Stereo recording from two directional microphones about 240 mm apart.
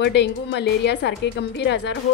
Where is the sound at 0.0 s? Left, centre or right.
Left.